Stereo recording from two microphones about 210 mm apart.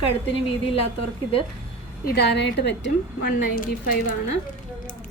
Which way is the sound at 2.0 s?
50° left (ahead or behind).